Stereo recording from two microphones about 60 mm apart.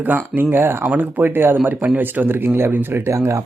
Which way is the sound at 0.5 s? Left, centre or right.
Right.